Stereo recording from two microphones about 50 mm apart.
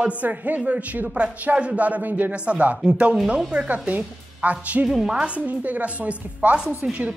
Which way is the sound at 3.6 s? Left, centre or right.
Right.